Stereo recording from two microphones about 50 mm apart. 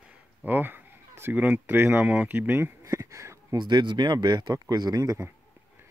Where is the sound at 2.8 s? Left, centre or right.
Right.